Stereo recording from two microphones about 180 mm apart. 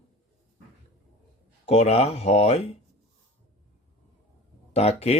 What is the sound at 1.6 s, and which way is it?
Speech, 35° left (ahead or behind).